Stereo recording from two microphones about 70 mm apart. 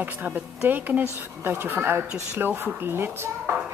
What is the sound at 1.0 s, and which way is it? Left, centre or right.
Speech, right.